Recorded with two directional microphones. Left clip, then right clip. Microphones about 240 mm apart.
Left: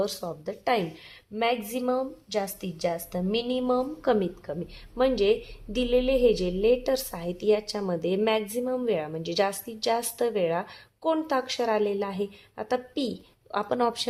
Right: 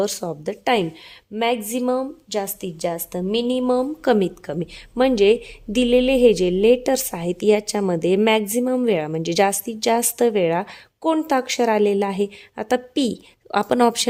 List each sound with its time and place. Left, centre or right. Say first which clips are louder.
0.0 s a woman's voice: right 6 dB; right